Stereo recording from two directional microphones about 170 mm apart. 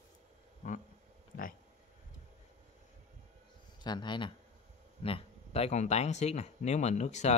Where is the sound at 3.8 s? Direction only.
25° left (ahead or behind).